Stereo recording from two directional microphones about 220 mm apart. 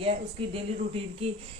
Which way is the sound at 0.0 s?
25° right (ahead or behind).